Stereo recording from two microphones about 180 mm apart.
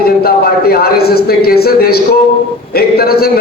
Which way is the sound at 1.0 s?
60° left (ahead or behind).